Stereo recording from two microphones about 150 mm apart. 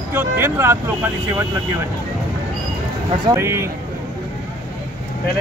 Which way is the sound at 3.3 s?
20° right (ahead or behind).